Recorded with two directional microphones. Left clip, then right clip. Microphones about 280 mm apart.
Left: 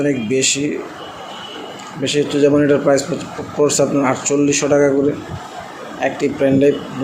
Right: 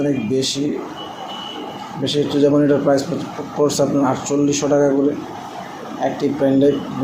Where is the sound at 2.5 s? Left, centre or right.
Left.